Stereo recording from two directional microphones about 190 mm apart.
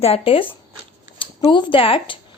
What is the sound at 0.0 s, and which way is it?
A woman's voice, 30° left (ahead or behind).